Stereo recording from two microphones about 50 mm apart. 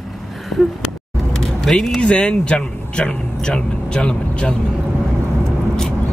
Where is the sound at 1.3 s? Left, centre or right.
Centre.